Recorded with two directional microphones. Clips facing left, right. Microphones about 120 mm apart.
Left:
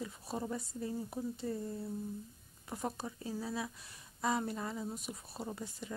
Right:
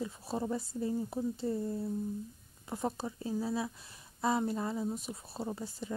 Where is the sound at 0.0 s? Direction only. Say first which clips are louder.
Right 4 dB; 30° right (ahead or behind).